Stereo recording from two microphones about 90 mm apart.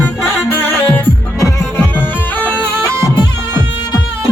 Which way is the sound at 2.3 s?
20° left (ahead or behind).